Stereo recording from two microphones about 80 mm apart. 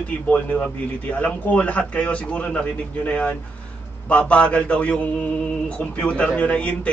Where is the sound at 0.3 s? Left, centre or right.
Centre.